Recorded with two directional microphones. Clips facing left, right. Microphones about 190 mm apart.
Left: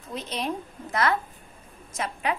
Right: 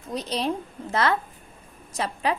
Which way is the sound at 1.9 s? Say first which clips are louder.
Right 3 dB; 30° right (ahead or behind).